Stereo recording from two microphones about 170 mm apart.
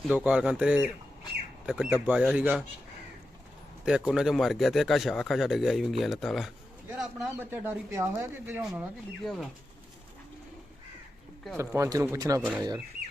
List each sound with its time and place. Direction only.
0.1 s speech: 5° right (ahead or behind)
3.8 s speech: 5° right (ahead or behind)
9.2 s speech: centre (ahead or behind)
11.5 s speech: 15° right (ahead or behind)